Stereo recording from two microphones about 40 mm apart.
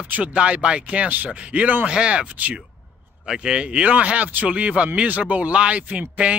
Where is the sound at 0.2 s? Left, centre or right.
Right.